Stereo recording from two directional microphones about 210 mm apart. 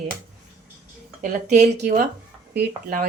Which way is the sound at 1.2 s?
35° right (ahead or behind).